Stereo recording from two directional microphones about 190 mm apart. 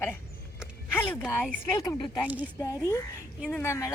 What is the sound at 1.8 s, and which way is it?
Speech, 15° left (ahead or behind).